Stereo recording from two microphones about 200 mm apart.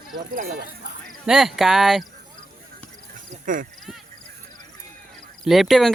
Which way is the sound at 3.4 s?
40° right (ahead or behind).